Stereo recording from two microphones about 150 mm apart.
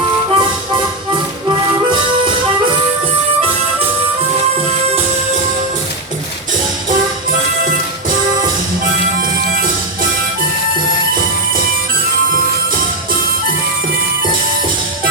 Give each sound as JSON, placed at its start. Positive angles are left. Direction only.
{"t": 0.3, "sound": "music", "side_deg": -30}
{"t": 6.9, "sound": "music", "side_deg": -65}